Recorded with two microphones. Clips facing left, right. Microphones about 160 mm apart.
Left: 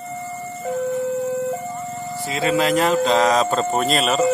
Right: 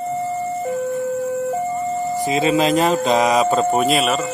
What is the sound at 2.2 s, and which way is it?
Speech, 20° right (ahead or behind).